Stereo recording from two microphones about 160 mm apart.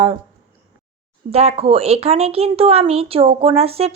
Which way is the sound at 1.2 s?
40° right (ahead or behind).